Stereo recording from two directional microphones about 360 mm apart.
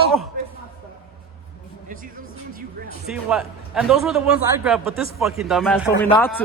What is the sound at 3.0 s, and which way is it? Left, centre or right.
A man's voice, centre.